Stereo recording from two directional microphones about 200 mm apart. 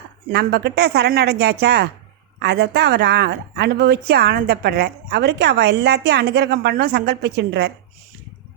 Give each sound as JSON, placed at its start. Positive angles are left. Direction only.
{"t": 0.3, "sound": "speech", "side_deg": -55}